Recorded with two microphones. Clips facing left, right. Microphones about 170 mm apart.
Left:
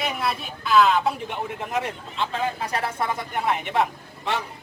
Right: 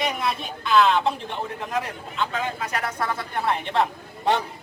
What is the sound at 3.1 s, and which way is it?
Speech, 15° left (ahead or behind).